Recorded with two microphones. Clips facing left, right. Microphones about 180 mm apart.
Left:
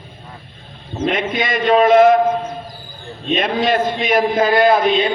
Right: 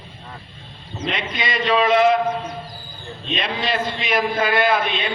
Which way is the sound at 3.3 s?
50° left (ahead or behind).